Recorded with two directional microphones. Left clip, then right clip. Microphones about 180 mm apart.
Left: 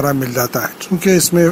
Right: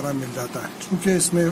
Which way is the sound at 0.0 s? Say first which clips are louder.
Left 11 dB; 40° left (ahead or behind).